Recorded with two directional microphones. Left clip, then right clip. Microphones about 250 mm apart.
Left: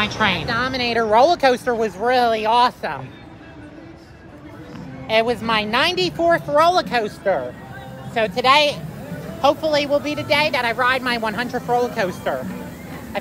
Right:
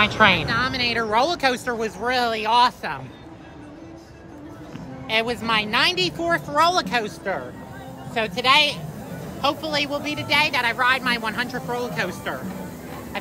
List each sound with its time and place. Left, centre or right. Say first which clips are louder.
0.0 s a woman's voice: right 3 dB; centre
0.5 s speech: left 1 dB; centre
5.0 s a woman's voice: left 4 dB; centre
13.1 s vehicle: left 5 dB; centre